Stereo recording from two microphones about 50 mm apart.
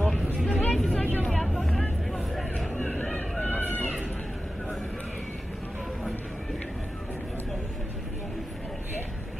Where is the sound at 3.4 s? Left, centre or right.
Left.